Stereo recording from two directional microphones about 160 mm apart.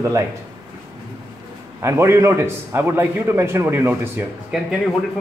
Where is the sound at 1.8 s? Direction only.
15° right (ahead or behind).